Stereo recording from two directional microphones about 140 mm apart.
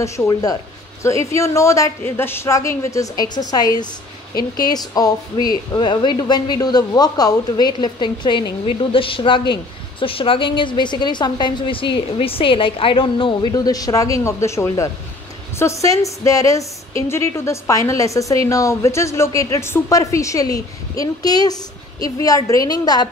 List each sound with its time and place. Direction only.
0.0 s a woman's voice: 20° left (ahead or behind); by 13.5 s 35° left (ahead or behind)
13.5 s a woman's voice: 25° left (ahead or behind)